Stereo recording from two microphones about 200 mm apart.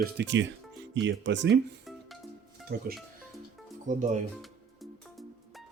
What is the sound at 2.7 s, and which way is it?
Speech, 50° right (ahead or behind).